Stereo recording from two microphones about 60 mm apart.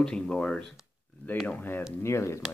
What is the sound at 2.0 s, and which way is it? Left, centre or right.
Speech, left.